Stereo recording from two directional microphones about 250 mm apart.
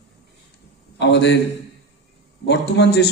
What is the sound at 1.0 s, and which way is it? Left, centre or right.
Speech, left.